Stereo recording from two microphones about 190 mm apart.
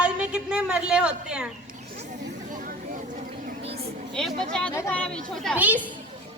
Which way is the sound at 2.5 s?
45° right (ahead or behind).